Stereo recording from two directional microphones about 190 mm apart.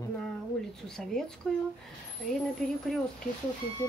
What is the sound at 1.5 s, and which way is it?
Speech, centre (ahead or behind).